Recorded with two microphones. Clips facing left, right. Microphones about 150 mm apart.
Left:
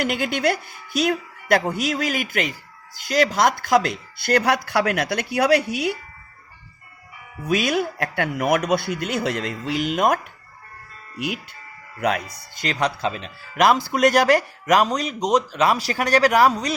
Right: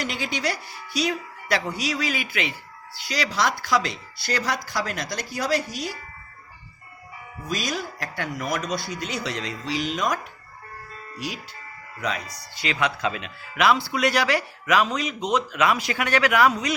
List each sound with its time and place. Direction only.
0.0 s speech: 55° left (ahead or behind)
7.4 s speech: 60° left (ahead or behind)
11.9 s speech: 55° left (ahead or behind)
12.6 s speech: 35° left (ahead or behind)